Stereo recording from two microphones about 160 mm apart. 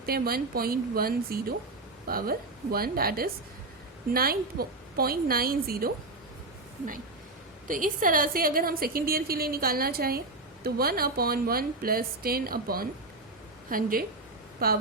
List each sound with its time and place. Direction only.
0.0 s a woman's voice: 70° right (ahead or behind)
7.7 s a woman's voice: 55° right (ahead or behind)